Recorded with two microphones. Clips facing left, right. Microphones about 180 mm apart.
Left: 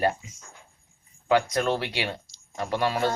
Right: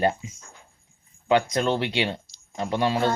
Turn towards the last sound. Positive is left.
turn(degrees=-20)  # may be behind; listen again after turning